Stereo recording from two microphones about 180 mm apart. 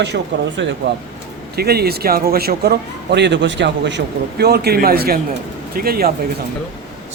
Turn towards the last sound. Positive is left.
turn(degrees=-55)  # may be behind; listen again after turning